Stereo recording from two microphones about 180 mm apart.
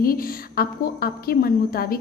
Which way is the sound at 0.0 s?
55° left (ahead or behind).